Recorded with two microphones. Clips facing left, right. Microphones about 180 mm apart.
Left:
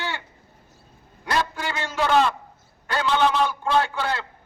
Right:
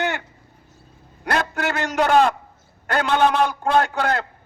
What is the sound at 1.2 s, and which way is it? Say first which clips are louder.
A man's voice: right 3 dB; 60° right (ahead or behind).